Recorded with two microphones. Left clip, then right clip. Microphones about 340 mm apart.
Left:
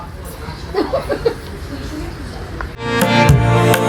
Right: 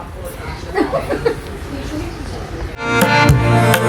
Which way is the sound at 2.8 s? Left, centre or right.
Centre.